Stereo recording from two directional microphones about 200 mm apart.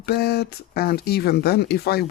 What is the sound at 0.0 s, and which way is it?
Speech, 55° left (ahead or behind).